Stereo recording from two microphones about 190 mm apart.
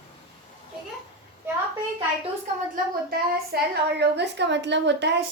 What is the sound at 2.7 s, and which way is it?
A woman's voice, 55° right (ahead or behind).